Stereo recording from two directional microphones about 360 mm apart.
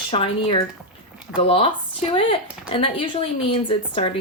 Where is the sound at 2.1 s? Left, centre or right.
Centre.